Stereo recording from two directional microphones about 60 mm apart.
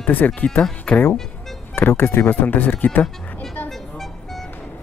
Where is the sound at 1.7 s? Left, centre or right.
Left.